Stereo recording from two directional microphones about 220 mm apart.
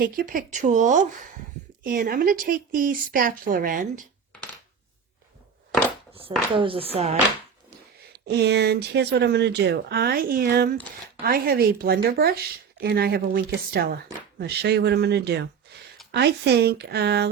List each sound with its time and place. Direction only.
0.0 s speech: 40° right (ahead or behind)
6.1 s a woman's voice: 25° right (ahead or behind)
8.3 s speech: 50° right (ahead or behind)
15.7 s a sound: 50° right (ahead or behind)
16.1 s speech: 50° right (ahead or behind)